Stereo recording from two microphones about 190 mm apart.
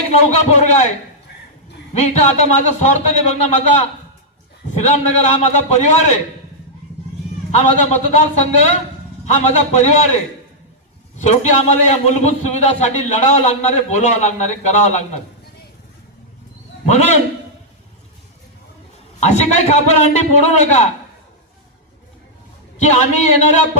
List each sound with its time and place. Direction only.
0.3 s a man's voice: 35° left (ahead or behind)
1.9 s a man's voice: 35° left (ahead or behind)
7.5 s a man's voice: 35° left (ahead or behind)
11.2 s a man's voice: 35° left (ahead or behind)
16.8 s a man's voice: 35° left (ahead or behind)
19.2 s a man's voice: 35° left (ahead or behind)
22.8 s a man's voice: 35° left (ahead or behind)